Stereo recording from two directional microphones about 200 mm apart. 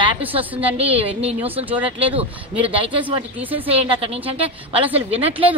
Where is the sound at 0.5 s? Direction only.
10° right (ahead or behind).